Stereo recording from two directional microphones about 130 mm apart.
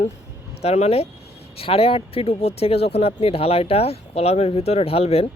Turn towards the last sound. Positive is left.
turn(degrees=50)  # may be behind; listen again after turning